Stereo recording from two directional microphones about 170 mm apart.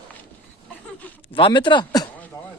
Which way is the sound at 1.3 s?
30° left (ahead or behind).